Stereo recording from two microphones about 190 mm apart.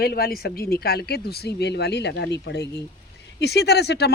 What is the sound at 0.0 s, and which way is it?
Speech, 55° left (ahead or behind).